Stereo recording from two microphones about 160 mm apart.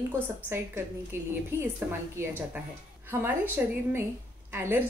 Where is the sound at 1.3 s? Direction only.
15° right (ahead or behind).